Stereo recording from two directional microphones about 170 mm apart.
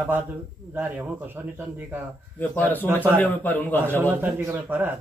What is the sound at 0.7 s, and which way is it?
Speech, 10° right (ahead or behind).